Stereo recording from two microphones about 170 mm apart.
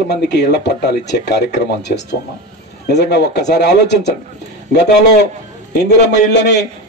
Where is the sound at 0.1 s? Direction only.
80° left.